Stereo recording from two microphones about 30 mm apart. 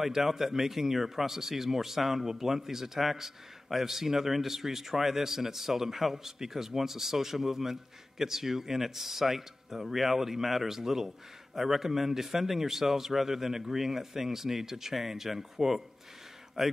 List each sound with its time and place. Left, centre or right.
0.0 s a man's voice: centre